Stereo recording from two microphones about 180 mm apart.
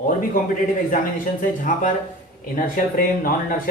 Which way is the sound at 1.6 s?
45° left (ahead or behind).